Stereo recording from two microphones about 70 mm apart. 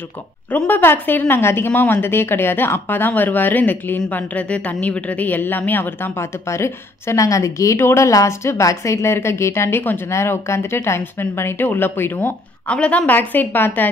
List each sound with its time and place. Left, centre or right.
0.7 s a woman's voice: left
6.5 s a woman's voice: left
12.6 s speech: centre